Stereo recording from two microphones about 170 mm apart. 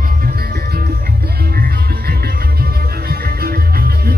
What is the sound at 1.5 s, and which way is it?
Music, 60° right (ahead or behind).